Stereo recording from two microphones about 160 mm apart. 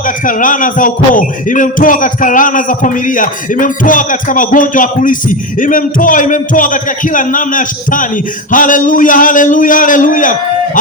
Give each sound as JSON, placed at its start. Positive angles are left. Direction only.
{"t": 0.3, "sound": "music", "side_deg": 55}